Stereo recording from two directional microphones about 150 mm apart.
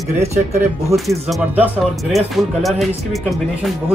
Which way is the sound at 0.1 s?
50° right (ahead or behind).